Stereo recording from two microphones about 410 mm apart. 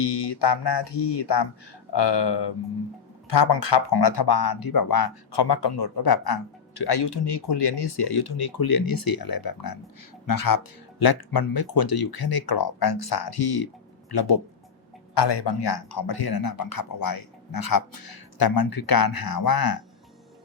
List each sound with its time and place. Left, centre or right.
0.0 s speech: left
15.1 s speech: left